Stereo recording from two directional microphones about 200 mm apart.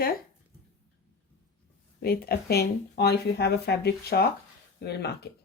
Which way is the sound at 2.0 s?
50° left (ahead or behind).